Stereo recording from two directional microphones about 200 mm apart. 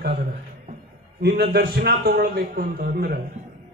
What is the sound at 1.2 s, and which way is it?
A man's voice, 50° right (ahead or behind).